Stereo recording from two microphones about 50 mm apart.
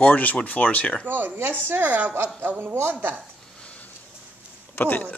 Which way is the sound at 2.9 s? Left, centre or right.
Right.